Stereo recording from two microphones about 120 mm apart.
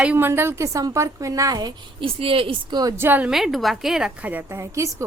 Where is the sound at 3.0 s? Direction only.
15° right (ahead or behind).